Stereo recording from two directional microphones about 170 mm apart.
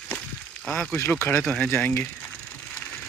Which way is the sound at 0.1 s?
5° left (ahead or behind).